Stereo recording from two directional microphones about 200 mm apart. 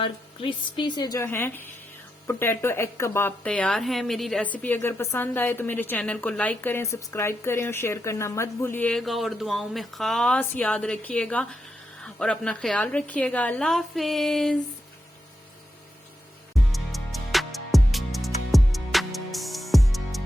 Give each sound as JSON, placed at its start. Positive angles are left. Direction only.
{"t": 0.0, "sound": "a woman's voice", "side_deg": 25}
{"t": 16.7, "sound": "music", "side_deg": 0}